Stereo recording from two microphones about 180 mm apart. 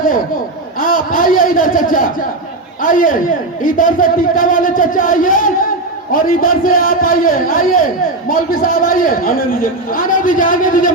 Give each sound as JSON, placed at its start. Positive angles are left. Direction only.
{"t": 0.8, "sound": "a man's voice", "side_deg": 50}